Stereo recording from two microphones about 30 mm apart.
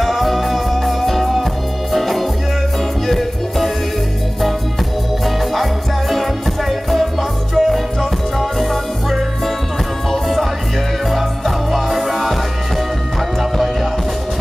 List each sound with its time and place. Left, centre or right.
0.0 s music: centre
5.2 s music: centre
10.1 s music: centre
13.4 s music: centre